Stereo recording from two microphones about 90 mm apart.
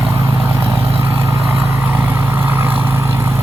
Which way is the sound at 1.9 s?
20° right (ahead or behind).